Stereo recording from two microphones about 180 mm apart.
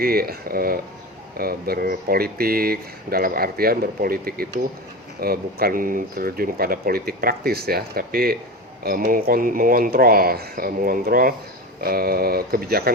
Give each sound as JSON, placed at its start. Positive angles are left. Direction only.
{"t": 0.0, "sound": "speech", "side_deg": -55}